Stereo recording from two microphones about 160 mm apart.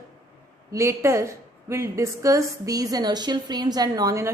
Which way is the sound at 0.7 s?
20° right (ahead or behind).